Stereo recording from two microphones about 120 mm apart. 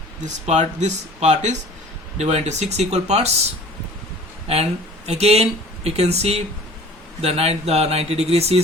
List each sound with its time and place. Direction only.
0.2 s speech: 80° right
4.4 s speech: 60° right (ahead or behind)